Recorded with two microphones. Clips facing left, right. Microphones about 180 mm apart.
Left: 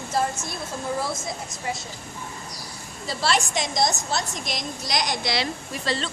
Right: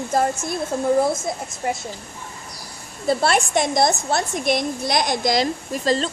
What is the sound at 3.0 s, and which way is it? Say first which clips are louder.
A woman's voice: right 6 dB; 55° right (ahead or behind).